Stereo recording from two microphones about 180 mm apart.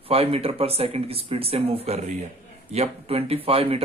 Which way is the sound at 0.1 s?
30° right (ahead or behind).